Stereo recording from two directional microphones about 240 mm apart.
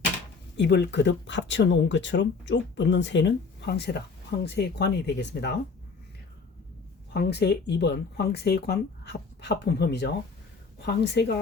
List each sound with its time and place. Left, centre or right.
0.5 s speech: left
7.1 s speech: left